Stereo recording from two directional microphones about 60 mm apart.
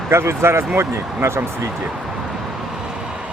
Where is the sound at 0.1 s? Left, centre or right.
Right.